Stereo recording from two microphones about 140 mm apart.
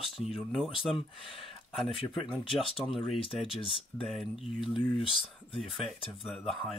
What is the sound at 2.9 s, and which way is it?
Speech, centre (ahead or behind).